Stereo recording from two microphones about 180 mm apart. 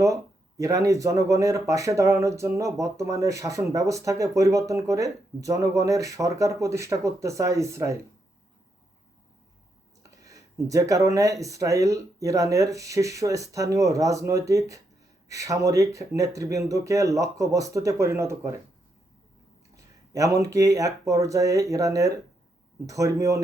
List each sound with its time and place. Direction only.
0.0 s speech: 15° right (ahead or behind)
10.1 s speech: 20° right (ahead or behind)
19.7 s speech: 20° right (ahead or behind)